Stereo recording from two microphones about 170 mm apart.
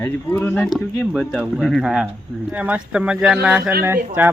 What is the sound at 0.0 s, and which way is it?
Speech, 10° left (ahead or behind).